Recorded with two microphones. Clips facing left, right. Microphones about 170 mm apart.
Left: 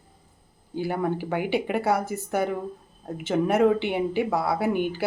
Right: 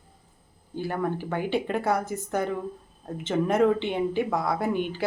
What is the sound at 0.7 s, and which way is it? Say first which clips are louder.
Speech: left 2 dB; 10° left (ahead or behind).